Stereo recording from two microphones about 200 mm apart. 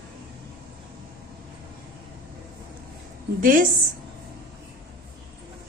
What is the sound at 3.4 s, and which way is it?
Speech, 45° right (ahead or behind).